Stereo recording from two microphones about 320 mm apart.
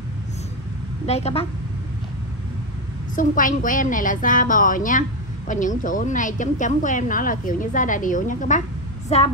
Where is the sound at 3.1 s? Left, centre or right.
Left.